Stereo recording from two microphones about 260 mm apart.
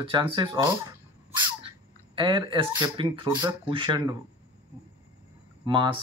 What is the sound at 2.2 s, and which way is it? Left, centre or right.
Speech, centre.